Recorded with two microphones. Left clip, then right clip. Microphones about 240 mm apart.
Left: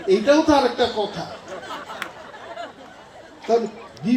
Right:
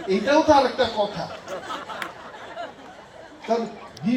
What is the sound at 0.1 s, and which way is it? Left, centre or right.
Speech, left.